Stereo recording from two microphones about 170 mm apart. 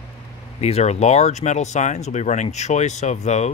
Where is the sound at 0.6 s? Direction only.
40° left (ahead or behind).